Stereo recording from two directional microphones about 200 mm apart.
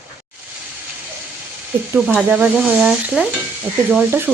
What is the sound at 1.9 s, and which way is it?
Speech, 5° right (ahead or behind).